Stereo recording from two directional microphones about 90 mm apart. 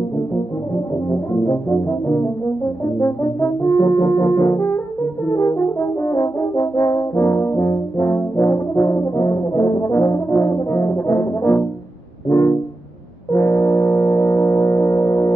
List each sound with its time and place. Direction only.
1.1 s brass instrument: 30° left (ahead or behind)
5.2 s french horn: 30° left (ahead or behind)
12.3 s music: 30° left (ahead or behind)
13.3 s gong: 30° left (ahead or behind)